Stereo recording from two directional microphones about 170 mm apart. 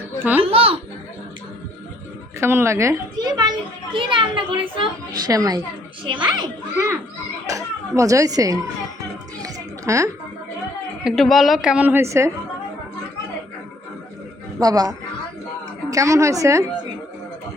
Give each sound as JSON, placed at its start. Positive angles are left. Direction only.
{"t": 0.5, "sound": "a child's voice", "side_deg": -35}
{"t": 2.4, "sound": "a child's voice", "side_deg": -15}
{"t": 9.4, "sound": "music", "side_deg": -20}
{"t": 11.0, "sound": "a woman's voice", "side_deg": 0}
{"t": 14.6, "sound": "a child's voice", "side_deg": -20}